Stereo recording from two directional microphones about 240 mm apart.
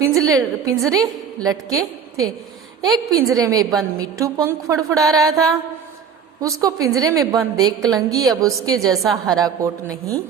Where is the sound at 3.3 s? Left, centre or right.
Centre.